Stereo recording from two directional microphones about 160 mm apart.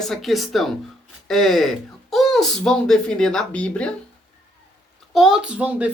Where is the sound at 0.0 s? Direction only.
Centre (ahead or behind).